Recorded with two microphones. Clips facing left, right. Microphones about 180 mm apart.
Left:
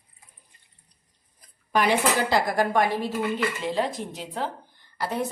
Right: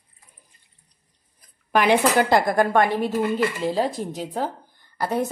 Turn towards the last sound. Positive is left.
turn(degrees=-50)  # may be behind; listen again after turning